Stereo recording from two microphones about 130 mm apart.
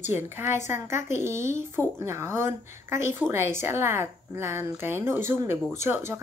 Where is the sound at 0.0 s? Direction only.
20° right (ahead or behind).